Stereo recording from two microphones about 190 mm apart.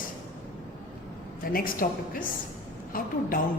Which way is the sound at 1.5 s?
50° left (ahead or behind).